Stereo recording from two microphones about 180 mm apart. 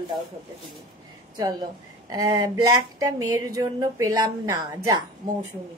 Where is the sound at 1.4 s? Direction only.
20° right (ahead or behind).